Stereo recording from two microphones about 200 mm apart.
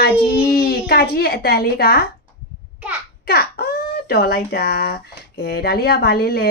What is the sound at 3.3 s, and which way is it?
Speech, 50° left (ahead or behind).